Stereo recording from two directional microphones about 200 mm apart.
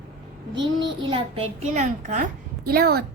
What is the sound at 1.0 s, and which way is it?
A child's voice, 30° right (ahead or behind).